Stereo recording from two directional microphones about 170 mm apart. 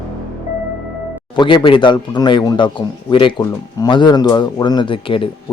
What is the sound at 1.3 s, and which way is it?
Speech, 25° left (ahead or behind).